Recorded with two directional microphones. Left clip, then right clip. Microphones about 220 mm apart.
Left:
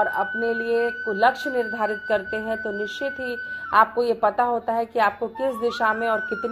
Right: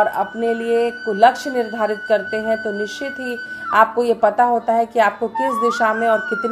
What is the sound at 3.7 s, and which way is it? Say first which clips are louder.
Speech: right 4 dB; 15° left (ahead or behind).